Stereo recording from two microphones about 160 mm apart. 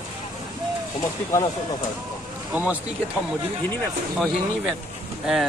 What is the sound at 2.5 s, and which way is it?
Speech, 10° right (ahead or behind).